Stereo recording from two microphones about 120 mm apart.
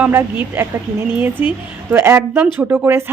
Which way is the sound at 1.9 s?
20° right (ahead or behind).